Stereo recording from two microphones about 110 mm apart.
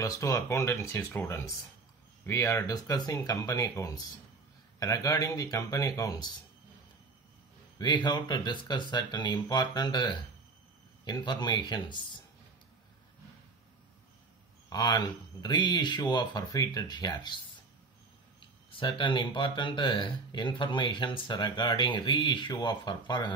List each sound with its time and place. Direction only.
0.0 s speech: 30° left (ahead or behind)
7.8 s speech: 45° left (ahead or behind)
14.7 s speech: 40° left (ahead or behind)
18.4 s speech: 45° left (ahead or behind)